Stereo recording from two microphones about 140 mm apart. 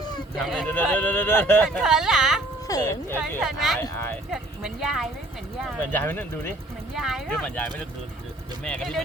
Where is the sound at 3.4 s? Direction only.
Centre (ahead or behind).